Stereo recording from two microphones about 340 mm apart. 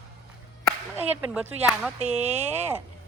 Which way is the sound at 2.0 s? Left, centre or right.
Centre.